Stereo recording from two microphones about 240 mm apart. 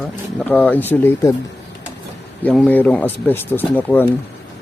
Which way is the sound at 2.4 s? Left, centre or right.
Centre.